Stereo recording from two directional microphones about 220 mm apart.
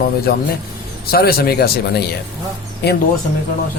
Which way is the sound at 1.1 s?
45° left (ahead or behind).